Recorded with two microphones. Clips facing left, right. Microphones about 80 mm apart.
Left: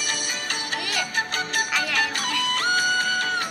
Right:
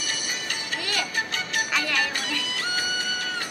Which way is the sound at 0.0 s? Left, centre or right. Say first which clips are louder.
Left 2 dB; left.